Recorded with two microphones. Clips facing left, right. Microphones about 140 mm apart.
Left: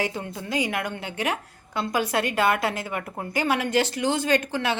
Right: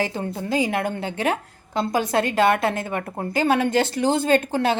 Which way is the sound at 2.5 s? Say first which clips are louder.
Right 4 dB; 55° right (ahead or behind).